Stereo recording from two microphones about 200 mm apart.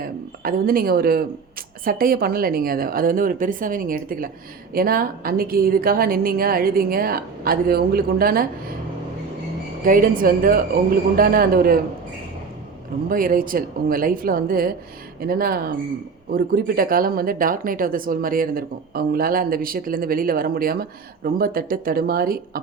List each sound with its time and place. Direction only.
0.0 s speech: 45° right (ahead or behind)
9.8 s speech: 45° right (ahead or behind)
13.1 s speech: 45° right (ahead or behind)